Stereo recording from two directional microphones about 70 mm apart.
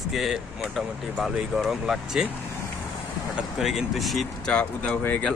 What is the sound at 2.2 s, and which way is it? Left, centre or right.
Speech, centre.